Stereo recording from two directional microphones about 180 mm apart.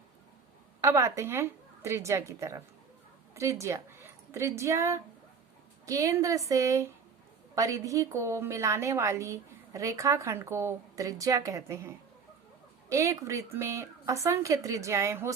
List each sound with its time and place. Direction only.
0.8 s a woman's voice: 15° right (ahead or behind)